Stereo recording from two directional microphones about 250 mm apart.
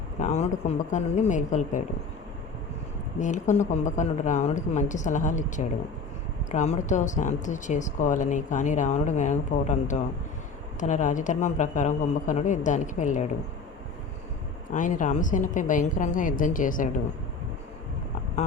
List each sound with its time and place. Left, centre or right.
0.2 s speech: left
3.2 s speech: left
14.7 s a woman's voice: left